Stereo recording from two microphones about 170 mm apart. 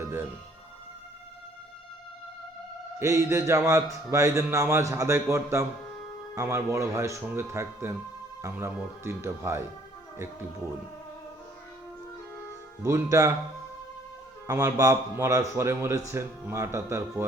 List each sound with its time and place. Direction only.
3.0 s speech: 15° right (ahead or behind)
12.8 s speech: 15° right (ahead or behind)
14.4 s speech: 20° right (ahead or behind)